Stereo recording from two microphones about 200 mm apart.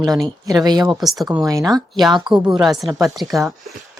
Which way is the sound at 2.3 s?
5° right (ahead or behind).